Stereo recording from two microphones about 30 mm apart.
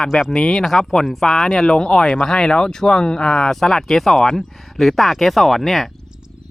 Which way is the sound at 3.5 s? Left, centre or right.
Centre.